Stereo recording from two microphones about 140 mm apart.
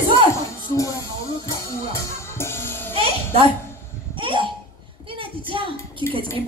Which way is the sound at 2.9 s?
45° right (ahead or behind).